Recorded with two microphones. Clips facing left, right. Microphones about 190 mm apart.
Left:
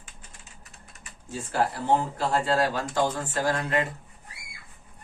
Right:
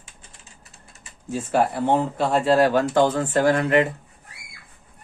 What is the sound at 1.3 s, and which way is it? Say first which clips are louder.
Speech: right 6 dB; 65° right (ahead or behind).